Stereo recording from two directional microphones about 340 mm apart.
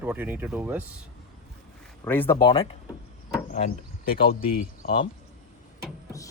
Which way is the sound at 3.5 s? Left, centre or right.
Left.